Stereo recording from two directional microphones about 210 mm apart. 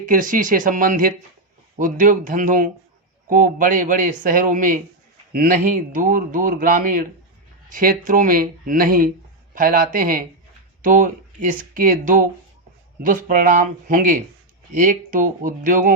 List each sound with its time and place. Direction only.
0.0 s speech: 40° right (ahead or behind)